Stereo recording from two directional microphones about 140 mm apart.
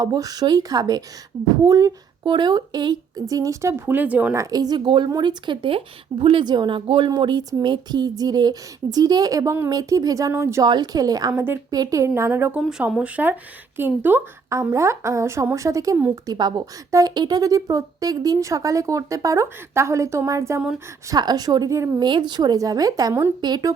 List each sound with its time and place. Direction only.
0.0 s speech: 25° right (ahead or behind)
4.4 s speech: 25° right (ahead or behind)
16.3 s speech: 30° right (ahead or behind)